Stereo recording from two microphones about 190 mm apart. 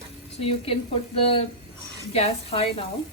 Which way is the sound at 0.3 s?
30° left (ahead or behind).